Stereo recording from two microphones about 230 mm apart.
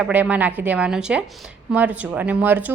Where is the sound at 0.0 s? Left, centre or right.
Centre.